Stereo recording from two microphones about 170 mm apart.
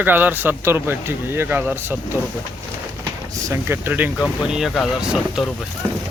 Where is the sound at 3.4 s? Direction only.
15° right (ahead or behind).